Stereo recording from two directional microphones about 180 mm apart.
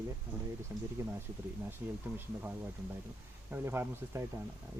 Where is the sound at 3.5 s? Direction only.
15° right (ahead or behind).